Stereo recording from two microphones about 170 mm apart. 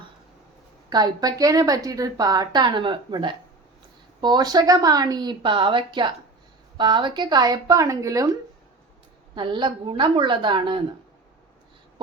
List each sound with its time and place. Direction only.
0.9 s a woman's voice: 25° right (ahead or behind)
9.3 s a woman's voice: 30° right (ahead or behind)